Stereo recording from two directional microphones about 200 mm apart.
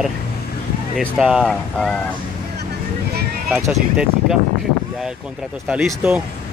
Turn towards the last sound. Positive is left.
turn(degrees=-5)  # may be behind; listen again after turning